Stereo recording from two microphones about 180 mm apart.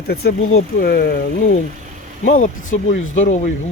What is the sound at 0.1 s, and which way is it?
Speech, 60° left (ahead or behind).